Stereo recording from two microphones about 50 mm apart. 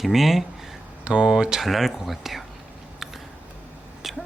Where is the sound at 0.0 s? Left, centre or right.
Centre.